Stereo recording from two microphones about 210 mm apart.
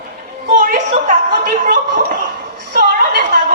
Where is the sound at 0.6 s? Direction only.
45° right (ahead or behind).